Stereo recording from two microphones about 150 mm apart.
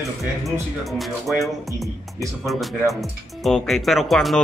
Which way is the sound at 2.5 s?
Centre (ahead or behind).